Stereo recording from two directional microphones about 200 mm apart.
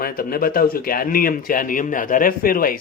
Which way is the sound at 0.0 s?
45° left (ahead or behind).